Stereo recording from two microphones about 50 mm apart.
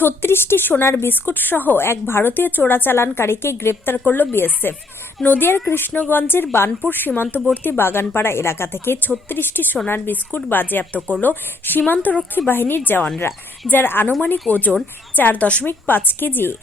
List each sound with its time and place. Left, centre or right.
0.0 s speech: left
3.9 s speech: left
7.2 s speech: left
12.5 s speech: left
14.5 s speech: centre
15.1 s speech: left
15.6 s speech: left